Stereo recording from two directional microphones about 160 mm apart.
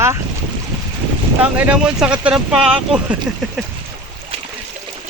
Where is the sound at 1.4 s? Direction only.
10° right (ahead or behind).